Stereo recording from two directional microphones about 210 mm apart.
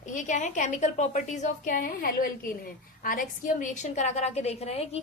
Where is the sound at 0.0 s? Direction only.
35° left (ahead or behind).